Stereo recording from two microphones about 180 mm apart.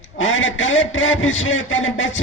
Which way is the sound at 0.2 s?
90° left.